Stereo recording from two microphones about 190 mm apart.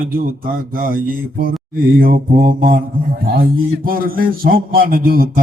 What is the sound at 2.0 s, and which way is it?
A man's voice, 50° right (ahead or behind).